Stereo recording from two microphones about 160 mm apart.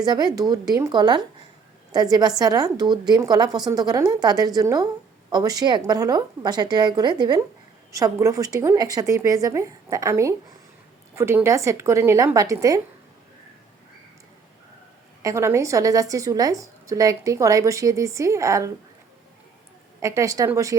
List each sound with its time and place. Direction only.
0.0 s a woman's voice: 25° right (ahead or behind)
15.2 s a woman's voice: 20° right (ahead or behind)
20.0 s a woman's voice: 20° right (ahead or behind)